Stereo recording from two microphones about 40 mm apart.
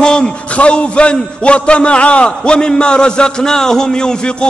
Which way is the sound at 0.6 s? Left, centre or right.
Left.